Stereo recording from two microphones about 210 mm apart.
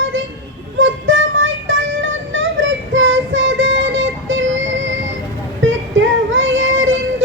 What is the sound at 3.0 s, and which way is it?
Child singing, 65° right (ahead or behind).